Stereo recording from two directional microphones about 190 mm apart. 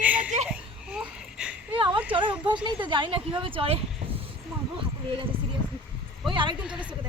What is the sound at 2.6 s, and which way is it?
A woman's voice, 25° right (ahead or behind).